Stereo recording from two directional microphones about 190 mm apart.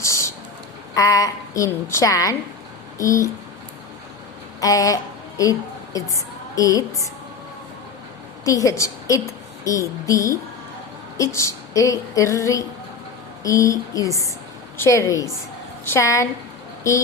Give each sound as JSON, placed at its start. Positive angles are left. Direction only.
{"t": 0.0, "sound": "a sound", "side_deg": 15}
{"t": 0.9, "sound": "a woman's voice", "side_deg": 15}
{"t": 4.6, "sound": "a woman's voice", "side_deg": 15}
{"t": 8.4, "sound": "a woman's voice", "side_deg": 15}